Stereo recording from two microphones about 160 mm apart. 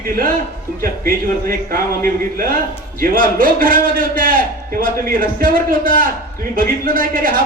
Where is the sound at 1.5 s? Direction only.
65° right (ahead or behind).